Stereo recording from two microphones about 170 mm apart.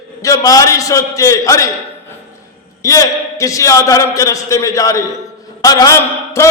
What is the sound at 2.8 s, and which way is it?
A man's voice, 20° left (ahead or behind).